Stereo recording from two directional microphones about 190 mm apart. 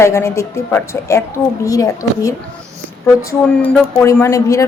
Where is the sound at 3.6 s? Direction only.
15° left (ahead or behind).